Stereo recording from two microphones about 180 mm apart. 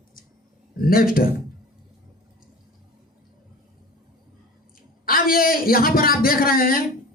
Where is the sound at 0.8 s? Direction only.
55° left (ahead or behind).